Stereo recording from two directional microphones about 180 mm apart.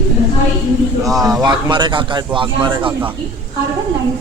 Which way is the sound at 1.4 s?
25° right (ahead or behind).